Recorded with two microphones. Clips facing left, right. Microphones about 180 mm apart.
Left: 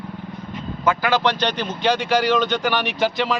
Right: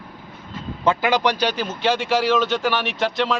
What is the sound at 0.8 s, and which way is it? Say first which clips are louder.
A man's voice: right 1 dB; 20° right (ahead or behind).